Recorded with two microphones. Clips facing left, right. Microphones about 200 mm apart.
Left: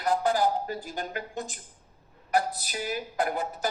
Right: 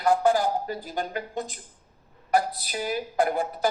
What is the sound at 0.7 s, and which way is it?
Speech, 45° left (ahead or behind).